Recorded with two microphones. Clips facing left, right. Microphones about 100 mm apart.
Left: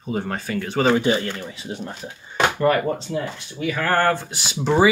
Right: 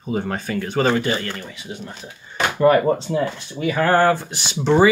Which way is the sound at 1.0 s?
20° left (ahead or behind).